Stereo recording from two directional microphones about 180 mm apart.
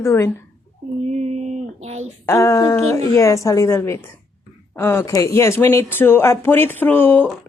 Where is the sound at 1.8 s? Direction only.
35° right (ahead or behind).